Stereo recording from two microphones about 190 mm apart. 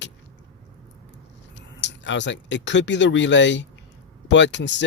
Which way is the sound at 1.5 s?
70° left (ahead or behind).